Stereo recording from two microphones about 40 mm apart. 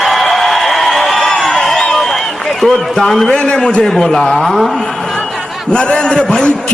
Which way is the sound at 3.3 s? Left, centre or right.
Left.